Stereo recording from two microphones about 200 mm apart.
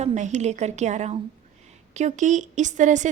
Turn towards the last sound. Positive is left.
turn(degrees=-40)  # may be behind; listen again after turning